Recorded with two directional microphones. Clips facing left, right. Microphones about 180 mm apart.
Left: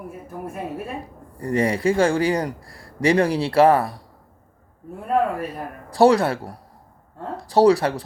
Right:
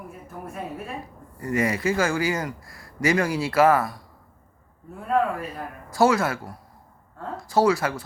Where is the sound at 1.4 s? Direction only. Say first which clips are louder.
Left 4 dB; 30° left (ahead or behind).